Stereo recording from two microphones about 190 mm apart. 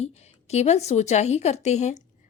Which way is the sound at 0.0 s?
35° left (ahead or behind).